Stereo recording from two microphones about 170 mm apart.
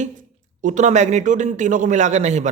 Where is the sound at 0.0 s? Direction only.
50° right (ahead or behind).